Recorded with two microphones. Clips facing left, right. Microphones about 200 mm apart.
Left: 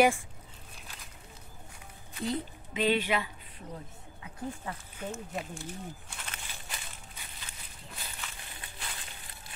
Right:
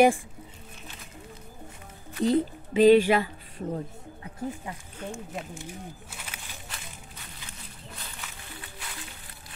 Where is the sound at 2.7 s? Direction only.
45° right (ahead or behind).